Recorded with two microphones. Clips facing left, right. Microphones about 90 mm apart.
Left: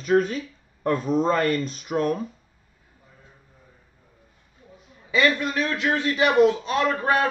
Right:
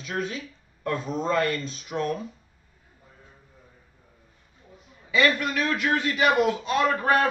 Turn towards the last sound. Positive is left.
turn(degrees=25)  # may be behind; listen again after turning